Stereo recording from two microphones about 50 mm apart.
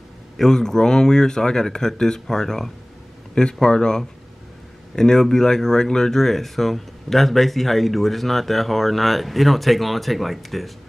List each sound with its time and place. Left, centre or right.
0.4 s speech: centre